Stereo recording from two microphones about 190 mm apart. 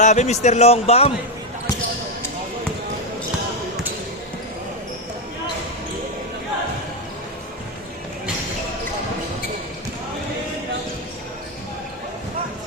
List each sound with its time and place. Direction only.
0.0 s a man's voice: 40° left (ahead or behind)